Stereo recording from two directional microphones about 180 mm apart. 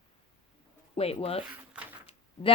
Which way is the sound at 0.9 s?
35° left (ahead or behind).